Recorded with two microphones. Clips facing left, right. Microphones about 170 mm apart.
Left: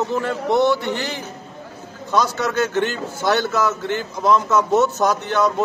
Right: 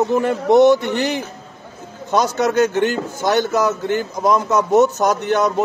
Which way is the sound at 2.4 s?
15° right (ahead or behind).